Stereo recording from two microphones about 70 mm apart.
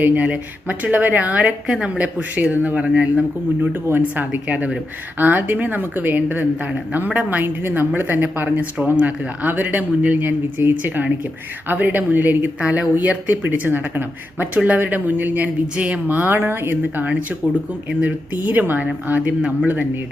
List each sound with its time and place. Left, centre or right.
0.0 s a woman's voice: right
3.6 s a woman's voice: right